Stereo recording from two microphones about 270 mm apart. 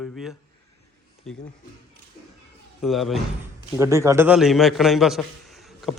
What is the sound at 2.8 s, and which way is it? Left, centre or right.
Speech, centre.